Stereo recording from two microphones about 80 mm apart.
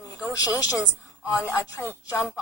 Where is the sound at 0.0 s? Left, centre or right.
Left.